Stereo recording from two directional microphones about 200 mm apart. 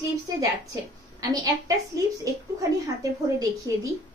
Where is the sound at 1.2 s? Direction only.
15° right (ahead or behind).